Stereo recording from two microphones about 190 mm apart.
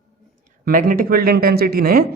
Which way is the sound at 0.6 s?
45° right (ahead or behind).